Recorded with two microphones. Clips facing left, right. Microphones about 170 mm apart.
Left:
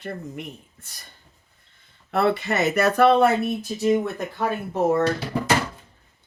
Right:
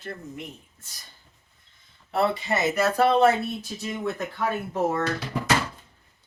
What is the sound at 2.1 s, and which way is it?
Speech, 65° left (ahead or behind).